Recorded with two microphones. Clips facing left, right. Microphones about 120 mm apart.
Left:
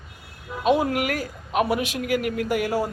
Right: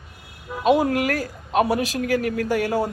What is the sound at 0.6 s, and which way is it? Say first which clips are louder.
A woman's voice: right 2 dB; 40° right (ahead or behind).